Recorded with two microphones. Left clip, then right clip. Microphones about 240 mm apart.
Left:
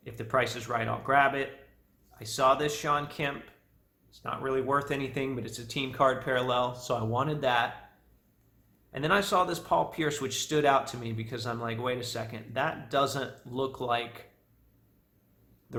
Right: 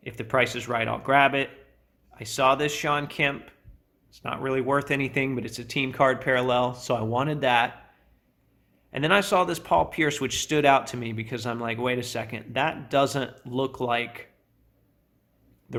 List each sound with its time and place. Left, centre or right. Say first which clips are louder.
0.0 s speech: right 4 dB; right
8.9 s speech: right 5 dB; right